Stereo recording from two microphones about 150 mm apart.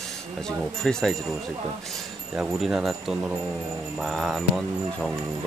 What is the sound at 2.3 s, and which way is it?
Speech, 5° right (ahead or behind).